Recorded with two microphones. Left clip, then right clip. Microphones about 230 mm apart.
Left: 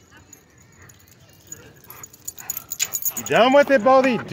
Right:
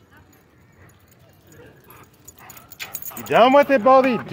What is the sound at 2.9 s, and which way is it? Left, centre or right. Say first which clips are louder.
Speech: right 2 dB; centre.